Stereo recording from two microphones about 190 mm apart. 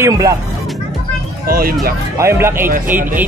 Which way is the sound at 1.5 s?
50° right (ahead or behind).